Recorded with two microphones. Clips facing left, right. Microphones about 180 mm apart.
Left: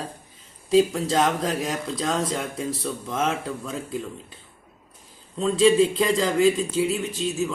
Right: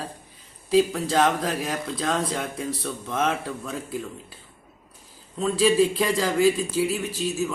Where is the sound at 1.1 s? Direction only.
Centre (ahead or behind).